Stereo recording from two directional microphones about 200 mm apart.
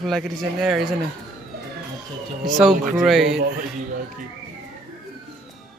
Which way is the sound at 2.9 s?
Centre (ahead or behind).